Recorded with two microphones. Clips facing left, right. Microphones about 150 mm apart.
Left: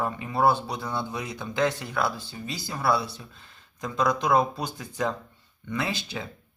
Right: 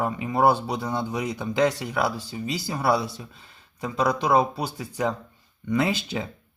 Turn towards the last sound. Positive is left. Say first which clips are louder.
# right 6 dB
turn(degrees=-15)  # may be behind; listen again after turning